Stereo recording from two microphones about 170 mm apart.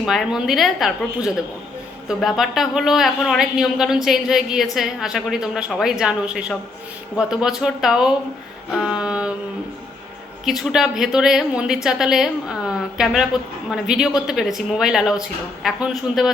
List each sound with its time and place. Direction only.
0.0 s speech: centre (ahead or behind)
10.4 s speech: centre (ahead or behind)